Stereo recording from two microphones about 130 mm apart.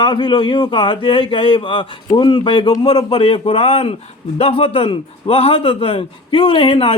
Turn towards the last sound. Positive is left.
turn(degrees=45)  # may be behind; listen again after turning